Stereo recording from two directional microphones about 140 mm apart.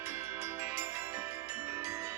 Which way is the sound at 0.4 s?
15° right (ahead or behind).